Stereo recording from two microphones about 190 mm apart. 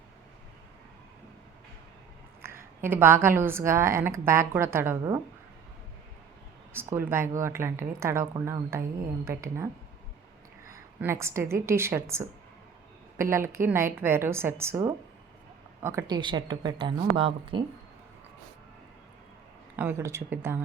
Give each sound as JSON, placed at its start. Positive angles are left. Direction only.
{"t": 2.4, "sound": "a woman's voice", "side_deg": -10}
{"t": 6.7, "sound": "a woman's voice", "side_deg": -10}
{"t": 10.7, "sound": "a woman's voice", "side_deg": -15}
{"t": 19.7, "sound": "a woman's voice", "side_deg": -10}